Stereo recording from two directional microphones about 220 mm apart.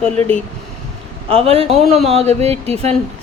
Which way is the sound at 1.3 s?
25° right (ahead or behind).